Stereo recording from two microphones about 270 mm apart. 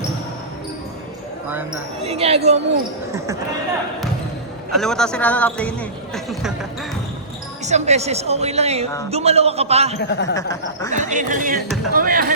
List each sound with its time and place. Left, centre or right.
2.0 s speech: right
4.7 s a man's voice: centre
7.6 s speech: right
10.0 s speech: left
10.3 s snicker: centre
10.9 s speech: right